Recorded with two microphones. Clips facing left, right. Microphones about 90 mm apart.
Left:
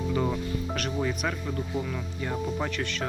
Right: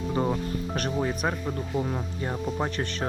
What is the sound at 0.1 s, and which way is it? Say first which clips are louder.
Speech: right 3 dB; 30° right (ahead or behind).